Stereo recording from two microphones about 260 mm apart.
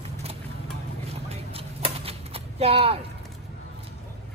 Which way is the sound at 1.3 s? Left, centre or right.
Right.